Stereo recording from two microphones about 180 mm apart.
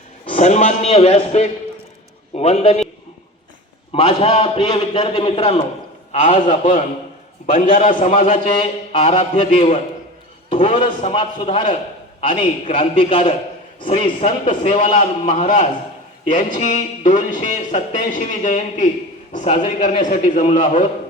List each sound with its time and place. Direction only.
0.3 s a sound: 40° left (ahead or behind)
2.3 s a man's voice: 35° left (ahead or behind)
3.9 s a man's voice: 35° left (ahead or behind)
8.3 s a man's voice: 30° left (ahead or behind)
14.3 s speech: 45° left (ahead or behind)
14.8 s a man's voice: 35° left (ahead or behind)